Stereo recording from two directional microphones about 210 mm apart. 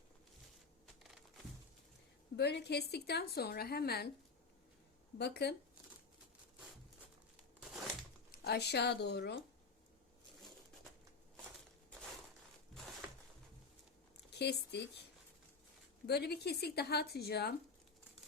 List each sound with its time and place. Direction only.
2.3 s a woman's voice: 50° left (ahead or behind)
5.1 s a woman's voice: 50° left (ahead or behind)
8.3 s a woman's voice: 50° left (ahead or behind)
14.3 s speech: 55° left (ahead or behind)
16.0 s a woman's voice: 50° left (ahead or behind)